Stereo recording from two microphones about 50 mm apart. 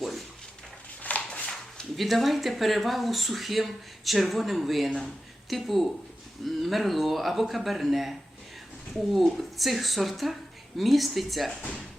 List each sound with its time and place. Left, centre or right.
1.1 s dog: left
1.5 s speech: centre